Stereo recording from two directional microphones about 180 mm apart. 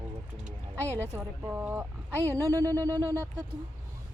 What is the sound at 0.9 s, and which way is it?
A woman's voice, 15° right (ahead or behind).